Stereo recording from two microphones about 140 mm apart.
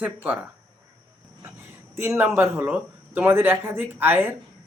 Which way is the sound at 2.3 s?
15° right (ahead or behind).